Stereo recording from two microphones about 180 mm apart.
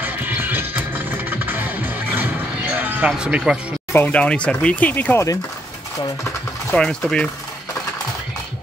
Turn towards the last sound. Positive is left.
turn(degrees=5)  # may be behind; listen again after turning